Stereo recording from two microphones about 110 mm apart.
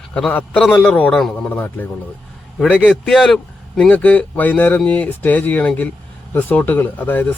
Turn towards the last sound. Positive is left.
turn(degrees=20)  # may be behind; listen again after turning